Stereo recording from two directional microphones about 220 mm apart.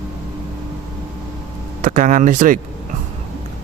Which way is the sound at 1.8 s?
35° right (ahead or behind).